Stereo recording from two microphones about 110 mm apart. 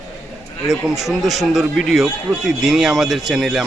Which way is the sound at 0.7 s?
5° right (ahead or behind).